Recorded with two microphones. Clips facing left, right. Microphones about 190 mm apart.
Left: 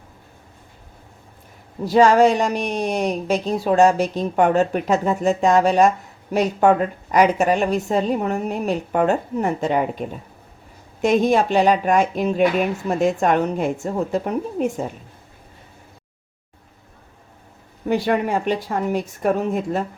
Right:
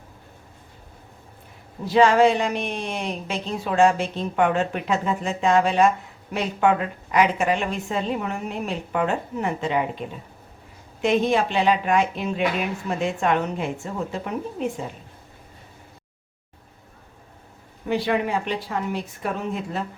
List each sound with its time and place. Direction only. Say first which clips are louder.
1.8 s speech: left 3 dB; 40° left (ahead or behind)
11.0 s speech: left 4 dB; 45° left (ahead or behind)
17.8 s speech: left 3 dB; 45° left (ahead or behind)